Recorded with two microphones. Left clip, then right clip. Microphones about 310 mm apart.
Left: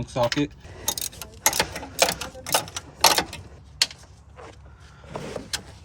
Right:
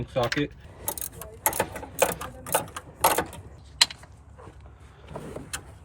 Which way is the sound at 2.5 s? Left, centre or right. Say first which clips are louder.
Left 3 dB; left.